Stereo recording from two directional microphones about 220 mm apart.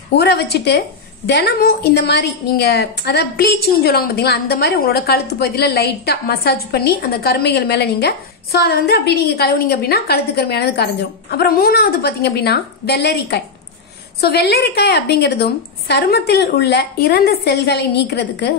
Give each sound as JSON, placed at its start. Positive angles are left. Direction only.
{"t": 0.1, "sound": "a woman's voice", "side_deg": 50}